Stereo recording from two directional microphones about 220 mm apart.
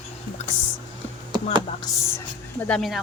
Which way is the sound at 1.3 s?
20° right (ahead or behind).